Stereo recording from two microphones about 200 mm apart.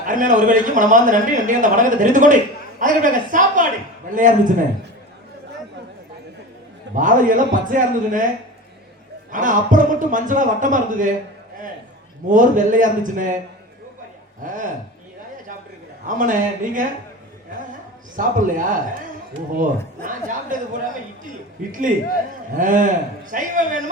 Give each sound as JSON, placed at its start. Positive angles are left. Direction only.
{"t": 0.0, "sound": "speech", "side_deg": -40}
{"t": 6.9, "sound": "speech", "side_deg": -40}
{"t": 9.3, "sound": "speech", "side_deg": -40}
{"t": 12.3, "sound": "speech", "side_deg": -40}
{"t": 14.4, "sound": "speech", "side_deg": -40}
{"t": 16.0, "sound": "speech", "side_deg": -40}
{"t": 18.2, "sound": "speech", "side_deg": -40}
{"t": 20.0, "sound": "speech", "side_deg": -40}
{"t": 21.7, "sound": "speech", "side_deg": -40}